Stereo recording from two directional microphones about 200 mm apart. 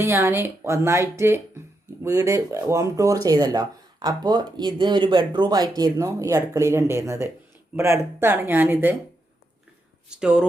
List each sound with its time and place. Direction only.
0.0 s speech: 10° right (ahead or behind)
10.1 s speech: 5° right (ahead or behind)